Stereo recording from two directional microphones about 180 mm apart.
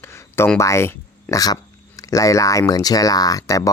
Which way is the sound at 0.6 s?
15° left (ahead or behind).